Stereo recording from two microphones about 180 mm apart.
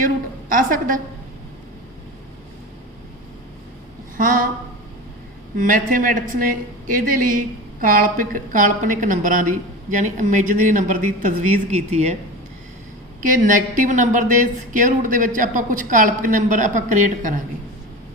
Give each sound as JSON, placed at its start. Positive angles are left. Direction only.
{"t": 0.0, "sound": "a woman's voice", "side_deg": -50}
{"t": 5.5, "sound": "a woman's voice", "side_deg": -45}
{"t": 13.2, "sound": "a woman's voice", "side_deg": -45}